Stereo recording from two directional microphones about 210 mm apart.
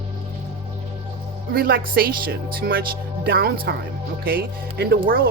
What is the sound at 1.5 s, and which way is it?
Speech, 45° right (ahead or behind).